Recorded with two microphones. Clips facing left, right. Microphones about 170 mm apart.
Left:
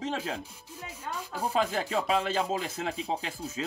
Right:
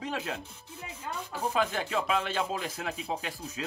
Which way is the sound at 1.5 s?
35° left (ahead or behind).